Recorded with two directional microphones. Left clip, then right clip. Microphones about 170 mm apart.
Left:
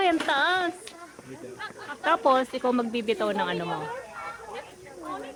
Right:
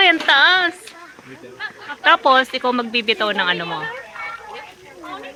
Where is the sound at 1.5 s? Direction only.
50° left (ahead or behind).